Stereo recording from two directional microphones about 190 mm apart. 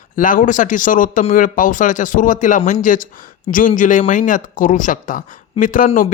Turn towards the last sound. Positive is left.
turn(degrees=45)  # may be behind; listen again after turning